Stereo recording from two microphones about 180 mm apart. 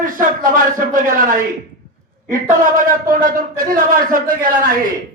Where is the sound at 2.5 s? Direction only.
45° right (ahead or behind).